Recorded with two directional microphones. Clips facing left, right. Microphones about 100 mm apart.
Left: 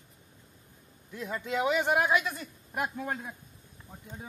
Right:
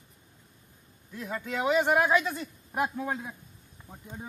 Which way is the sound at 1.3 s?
35° right (ahead or behind).